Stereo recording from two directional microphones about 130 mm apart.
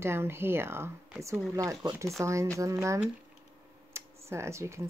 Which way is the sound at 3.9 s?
20° right (ahead or behind).